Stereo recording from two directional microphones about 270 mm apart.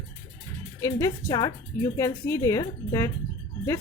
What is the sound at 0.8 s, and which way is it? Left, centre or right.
Speech, centre.